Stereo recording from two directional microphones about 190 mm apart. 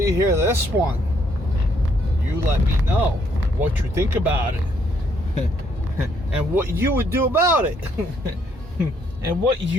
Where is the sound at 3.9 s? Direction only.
10° right (ahead or behind).